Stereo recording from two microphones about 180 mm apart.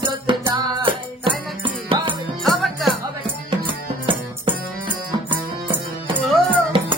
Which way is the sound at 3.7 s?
30° right (ahead or behind).